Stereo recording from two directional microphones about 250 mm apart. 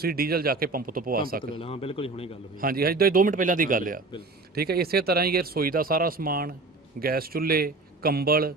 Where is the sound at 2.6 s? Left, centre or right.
Right.